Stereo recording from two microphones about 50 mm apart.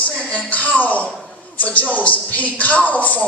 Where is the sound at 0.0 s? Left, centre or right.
Left.